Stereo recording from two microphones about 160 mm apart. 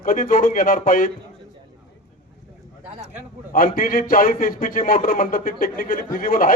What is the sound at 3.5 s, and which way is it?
Speech, 60° left (ahead or behind).